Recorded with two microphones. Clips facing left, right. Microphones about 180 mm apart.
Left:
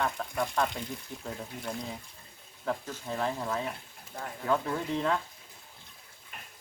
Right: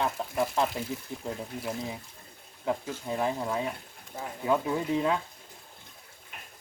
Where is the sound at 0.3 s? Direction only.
5° right (ahead or behind).